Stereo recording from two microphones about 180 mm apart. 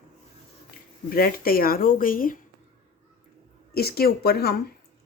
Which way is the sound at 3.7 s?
60° left (ahead or behind).